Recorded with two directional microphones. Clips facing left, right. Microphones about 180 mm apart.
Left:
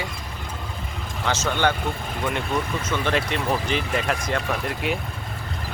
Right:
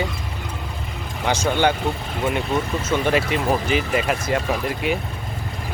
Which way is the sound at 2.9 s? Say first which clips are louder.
Right 5 dB; 10° right (ahead or behind).